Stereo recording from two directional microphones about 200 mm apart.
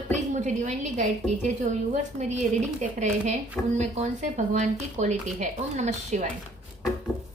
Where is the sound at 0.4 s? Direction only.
35° right (ahead or behind).